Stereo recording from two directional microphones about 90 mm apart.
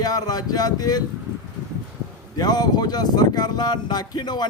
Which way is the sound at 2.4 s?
50° left (ahead or behind).